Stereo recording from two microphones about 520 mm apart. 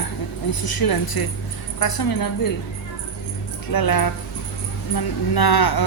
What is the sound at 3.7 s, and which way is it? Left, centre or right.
Speech, left.